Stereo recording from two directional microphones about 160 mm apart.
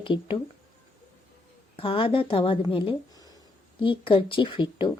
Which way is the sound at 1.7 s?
35° left (ahead or behind).